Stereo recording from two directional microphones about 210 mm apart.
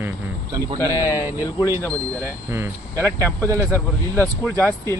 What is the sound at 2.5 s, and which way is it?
Speech, 10° right (ahead or behind).